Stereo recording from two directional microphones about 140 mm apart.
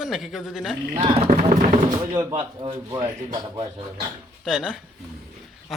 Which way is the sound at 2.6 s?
55° right (ahead or behind).